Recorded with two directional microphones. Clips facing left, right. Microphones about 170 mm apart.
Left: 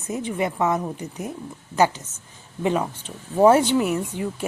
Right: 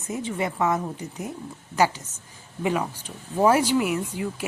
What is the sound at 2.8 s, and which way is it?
Speech, 15° left (ahead or behind).